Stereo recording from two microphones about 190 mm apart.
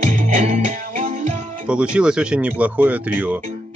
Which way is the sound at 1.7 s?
5° right (ahead or behind).